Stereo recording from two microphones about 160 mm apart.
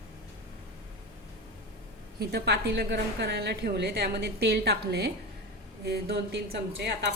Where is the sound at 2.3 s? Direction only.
90° right.